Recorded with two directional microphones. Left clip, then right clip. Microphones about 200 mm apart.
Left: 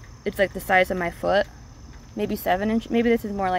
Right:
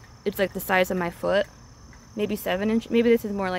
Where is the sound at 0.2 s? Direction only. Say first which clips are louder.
Left 2 dB; 20° right (ahead or behind).